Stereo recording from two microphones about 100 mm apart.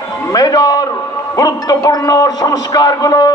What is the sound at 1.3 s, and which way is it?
A man's voice, 40° left (ahead or behind).